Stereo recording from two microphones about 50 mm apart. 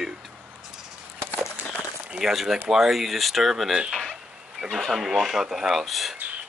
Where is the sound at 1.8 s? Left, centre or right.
Centre.